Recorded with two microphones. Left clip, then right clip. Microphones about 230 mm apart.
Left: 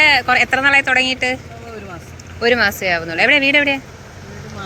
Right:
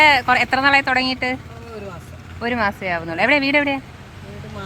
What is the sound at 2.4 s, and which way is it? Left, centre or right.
Speech, centre.